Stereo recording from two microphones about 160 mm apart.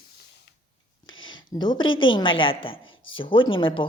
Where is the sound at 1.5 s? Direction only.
30° left (ahead or behind).